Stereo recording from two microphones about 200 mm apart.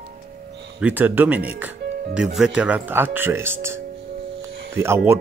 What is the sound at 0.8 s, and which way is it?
Speech, 10° right (ahead or behind).